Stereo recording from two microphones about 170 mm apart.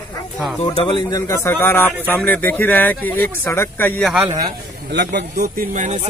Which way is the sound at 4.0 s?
5° right (ahead or behind).